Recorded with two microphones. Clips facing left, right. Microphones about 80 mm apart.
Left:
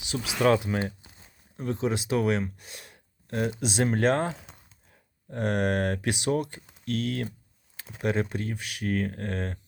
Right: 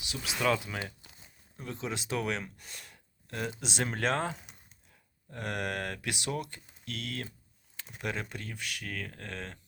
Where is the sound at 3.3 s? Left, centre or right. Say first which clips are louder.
Left 8 dB; centre.